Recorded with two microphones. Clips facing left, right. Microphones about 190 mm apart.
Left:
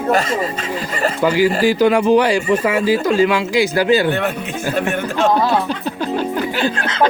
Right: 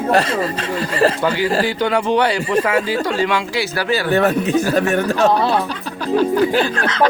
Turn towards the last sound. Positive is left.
turn(degrees=-40)  # may be behind; listen again after turning